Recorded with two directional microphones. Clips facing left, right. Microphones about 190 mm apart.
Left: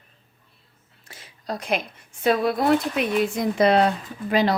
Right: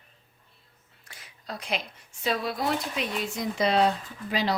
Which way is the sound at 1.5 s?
45° left (ahead or behind).